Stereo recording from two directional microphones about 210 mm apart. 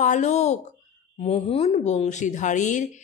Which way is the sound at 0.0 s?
35° left (ahead or behind).